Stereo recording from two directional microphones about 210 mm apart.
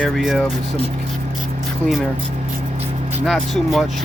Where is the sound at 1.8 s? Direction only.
Centre (ahead or behind).